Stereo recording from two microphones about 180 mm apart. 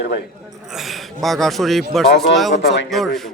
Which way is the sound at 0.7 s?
Centre (ahead or behind).